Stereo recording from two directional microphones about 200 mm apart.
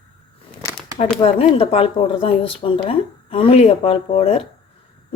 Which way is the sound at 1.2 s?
30° left (ahead or behind).